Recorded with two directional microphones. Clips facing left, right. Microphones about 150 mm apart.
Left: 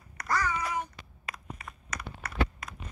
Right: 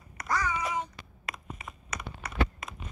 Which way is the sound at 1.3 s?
20° right (ahead or behind).